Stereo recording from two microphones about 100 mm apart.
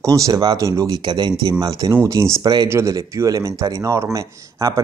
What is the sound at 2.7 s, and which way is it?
Speech, 30° right (ahead or behind).